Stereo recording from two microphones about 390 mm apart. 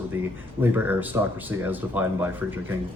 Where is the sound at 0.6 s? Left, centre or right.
Centre.